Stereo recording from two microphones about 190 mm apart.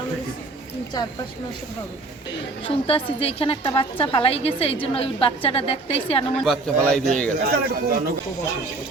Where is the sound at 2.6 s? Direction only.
30° left (ahead or behind).